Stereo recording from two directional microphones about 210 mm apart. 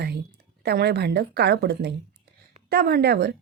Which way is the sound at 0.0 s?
50° right (ahead or behind).